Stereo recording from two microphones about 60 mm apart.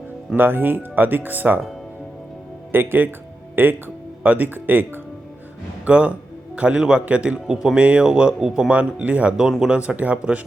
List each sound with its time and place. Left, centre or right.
0.3 s speech: right
2.7 s speech: right
5.8 s a man's voice: right
8.7 s a man's voice: right
9.4 s speech: centre
9.7 s a man's voice: right